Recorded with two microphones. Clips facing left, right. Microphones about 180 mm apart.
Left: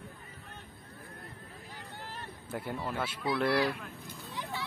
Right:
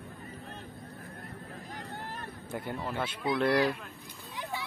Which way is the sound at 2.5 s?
5° left (ahead or behind).